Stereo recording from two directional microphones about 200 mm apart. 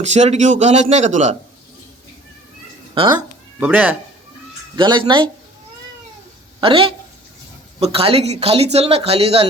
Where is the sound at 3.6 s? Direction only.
10° right (ahead or behind).